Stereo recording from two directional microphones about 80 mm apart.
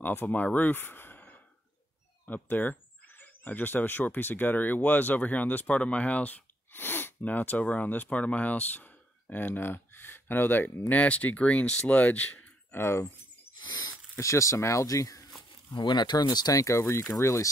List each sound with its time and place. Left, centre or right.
0.0 s speech: left
12.7 s speech: left
13.6 s rodents: left
14.1 s speech: left
15.7 s speech: left
16.6 s speech: left